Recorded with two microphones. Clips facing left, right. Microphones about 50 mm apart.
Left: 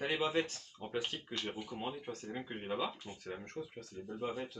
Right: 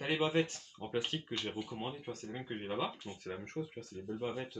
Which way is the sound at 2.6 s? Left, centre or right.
Centre.